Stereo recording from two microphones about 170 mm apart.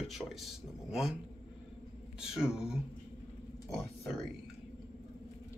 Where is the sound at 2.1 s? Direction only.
5° right (ahead or behind).